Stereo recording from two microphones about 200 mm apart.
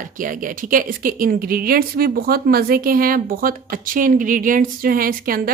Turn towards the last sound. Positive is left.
turn(degrees=-45)  # may be behind; listen again after turning